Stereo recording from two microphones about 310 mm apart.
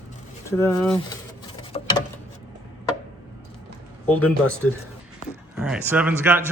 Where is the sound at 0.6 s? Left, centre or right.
Centre.